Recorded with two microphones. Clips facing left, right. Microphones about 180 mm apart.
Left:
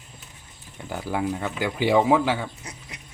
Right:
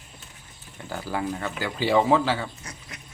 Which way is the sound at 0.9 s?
20° left (ahead or behind).